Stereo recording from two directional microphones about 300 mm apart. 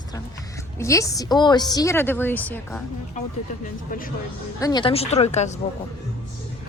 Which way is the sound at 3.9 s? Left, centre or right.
Left.